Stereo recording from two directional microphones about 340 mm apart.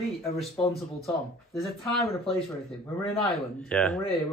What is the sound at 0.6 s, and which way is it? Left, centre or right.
Speech, centre.